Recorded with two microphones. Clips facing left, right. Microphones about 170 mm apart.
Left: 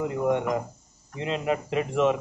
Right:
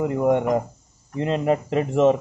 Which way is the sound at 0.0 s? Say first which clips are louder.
Right 5 dB; 50° right (ahead or behind).